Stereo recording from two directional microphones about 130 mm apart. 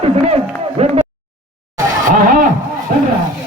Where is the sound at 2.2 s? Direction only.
90° right.